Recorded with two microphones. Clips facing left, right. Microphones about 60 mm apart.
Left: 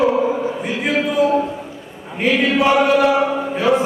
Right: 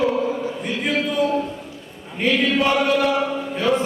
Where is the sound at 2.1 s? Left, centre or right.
Centre.